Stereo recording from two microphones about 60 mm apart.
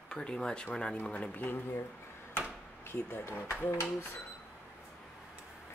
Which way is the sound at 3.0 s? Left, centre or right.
Left.